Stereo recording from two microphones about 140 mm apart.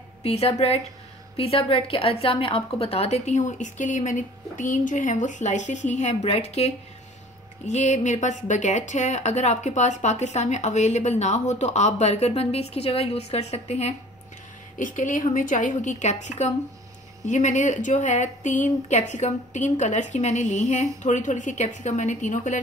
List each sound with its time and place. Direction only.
0.2 s a woman's voice: 45° left (ahead or behind)
14.8 s speech: 65° left (ahead or behind)